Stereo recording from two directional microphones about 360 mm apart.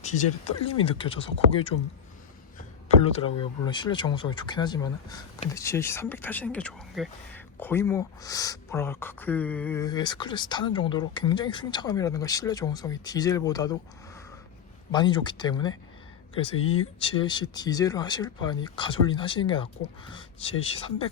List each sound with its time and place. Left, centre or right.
0.0 s a sound: centre
0.9 s speech: centre
3.0 s speech: centre
14.9 s speech: centre